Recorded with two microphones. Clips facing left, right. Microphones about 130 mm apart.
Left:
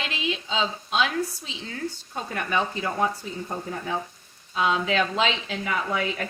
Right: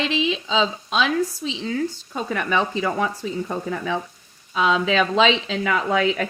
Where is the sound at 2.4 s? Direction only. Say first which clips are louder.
Right 3 dB; 90° right.